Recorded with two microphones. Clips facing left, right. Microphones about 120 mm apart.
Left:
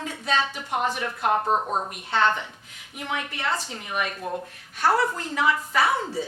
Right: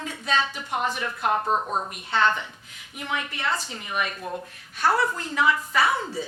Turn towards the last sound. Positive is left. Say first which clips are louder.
# even
turn(degrees=50)  # may be behind; listen again after turning